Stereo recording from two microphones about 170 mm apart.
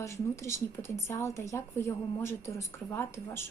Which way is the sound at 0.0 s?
15° left (ahead or behind).